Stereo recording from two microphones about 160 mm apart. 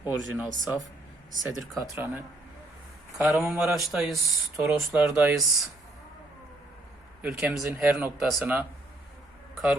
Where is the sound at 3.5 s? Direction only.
Centre (ahead or behind).